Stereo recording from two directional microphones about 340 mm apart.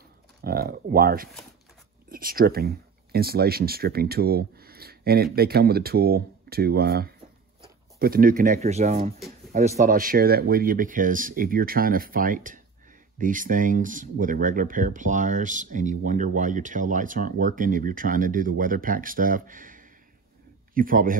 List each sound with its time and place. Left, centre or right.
0.4 s speech: right